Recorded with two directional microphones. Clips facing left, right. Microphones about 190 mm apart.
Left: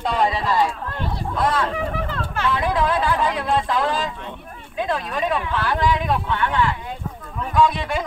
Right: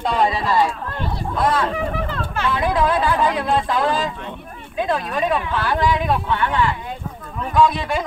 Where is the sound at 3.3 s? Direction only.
35° right (ahead or behind).